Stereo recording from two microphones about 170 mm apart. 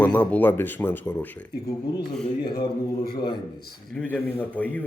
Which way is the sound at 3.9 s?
10° left (ahead or behind).